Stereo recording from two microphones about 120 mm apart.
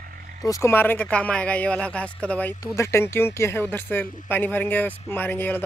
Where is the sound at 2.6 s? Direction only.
25° left (ahead or behind).